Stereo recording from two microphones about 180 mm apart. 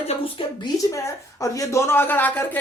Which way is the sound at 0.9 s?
15° left (ahead or behind).